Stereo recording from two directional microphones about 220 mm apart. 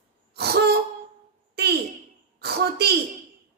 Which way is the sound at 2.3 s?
45° right (ahead or behind).